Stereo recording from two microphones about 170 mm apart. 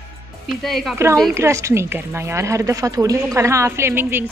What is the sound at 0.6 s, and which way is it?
Speech, centre (ahead or behind).